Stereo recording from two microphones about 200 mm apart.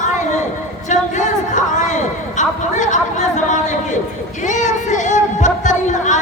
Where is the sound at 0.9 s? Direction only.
40° left (ahead or behind).